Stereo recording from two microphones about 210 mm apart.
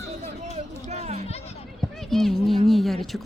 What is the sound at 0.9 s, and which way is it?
Children playing, 30° right (ahead or behind).